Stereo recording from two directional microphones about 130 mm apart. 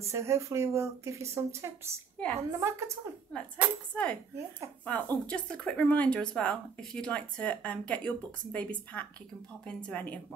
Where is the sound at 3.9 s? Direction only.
10° left (ahead or behind).